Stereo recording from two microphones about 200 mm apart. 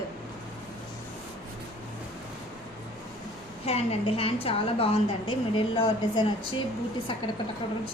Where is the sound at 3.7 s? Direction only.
30° left (ahead or behind).